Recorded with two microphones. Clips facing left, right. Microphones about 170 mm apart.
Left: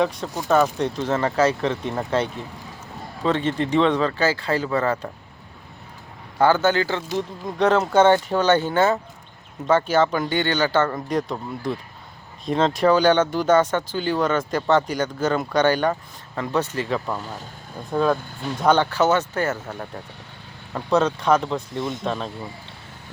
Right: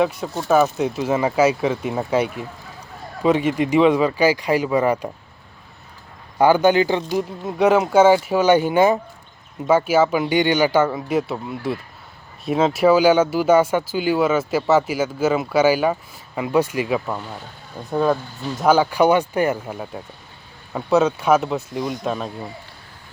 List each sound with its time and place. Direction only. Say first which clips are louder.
0.0 s speech: right 2 dB; 5° right (ahead or behind)
6.4 s speech: right 4 dB; 15° right (ahead or behind)
21.8 s speech: right 2 dB; 25° left (ahead or behind)
22.0 s speech: right 2 dB; 5° right (ahead or behind)